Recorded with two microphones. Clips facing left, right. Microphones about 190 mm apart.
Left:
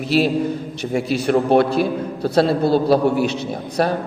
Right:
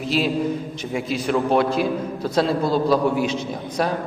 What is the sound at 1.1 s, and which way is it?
A woman's voice, 65° left (ahead or behind).